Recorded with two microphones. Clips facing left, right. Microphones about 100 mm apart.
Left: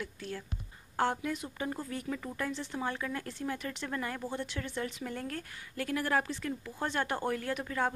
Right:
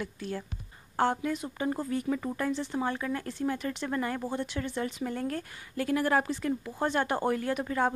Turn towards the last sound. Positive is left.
turn(degrees=-15)  # may be behind; listen again after turning